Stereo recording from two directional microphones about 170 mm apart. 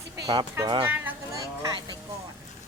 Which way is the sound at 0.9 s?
15° right (ahead or behind).